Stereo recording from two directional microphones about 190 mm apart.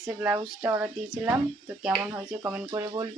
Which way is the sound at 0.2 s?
10° right (ahead or behind).